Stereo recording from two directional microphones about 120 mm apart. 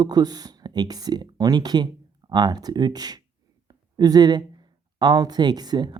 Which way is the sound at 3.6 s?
35° right (ahead or behind).